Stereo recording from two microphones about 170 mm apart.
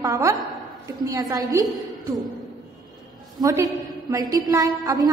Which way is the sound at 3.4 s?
15° right (ahead or behind).